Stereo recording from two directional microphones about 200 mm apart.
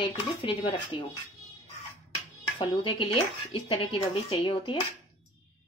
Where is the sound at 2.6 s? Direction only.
25° left (ahead or behind).